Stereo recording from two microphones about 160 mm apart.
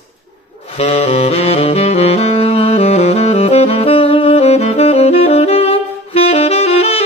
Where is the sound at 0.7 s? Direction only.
40° left (ahead or behind).